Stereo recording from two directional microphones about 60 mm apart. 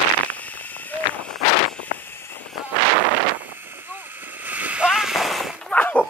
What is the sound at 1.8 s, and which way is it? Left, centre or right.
Vehicle, left.